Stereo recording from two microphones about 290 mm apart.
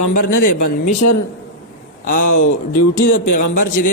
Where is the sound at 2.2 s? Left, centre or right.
Left.